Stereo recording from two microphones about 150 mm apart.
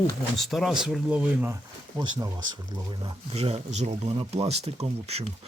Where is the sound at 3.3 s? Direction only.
45° right (ahead or behind).